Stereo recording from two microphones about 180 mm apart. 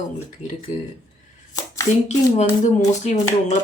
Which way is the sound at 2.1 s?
40° left (ahead or behind).